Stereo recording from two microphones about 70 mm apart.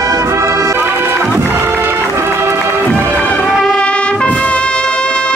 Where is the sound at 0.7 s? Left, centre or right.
Right.